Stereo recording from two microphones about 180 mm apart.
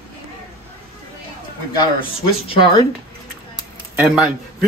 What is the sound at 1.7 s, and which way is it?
Speech, 30° left (ahead or behind).